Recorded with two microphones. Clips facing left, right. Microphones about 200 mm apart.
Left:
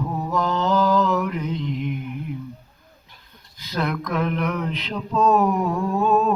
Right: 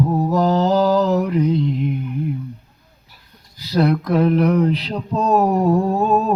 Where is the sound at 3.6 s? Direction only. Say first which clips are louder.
Right 8 dB; 35° right (ahead or behind).